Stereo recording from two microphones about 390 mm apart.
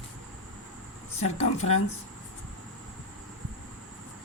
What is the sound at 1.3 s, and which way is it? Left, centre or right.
Speech, centre.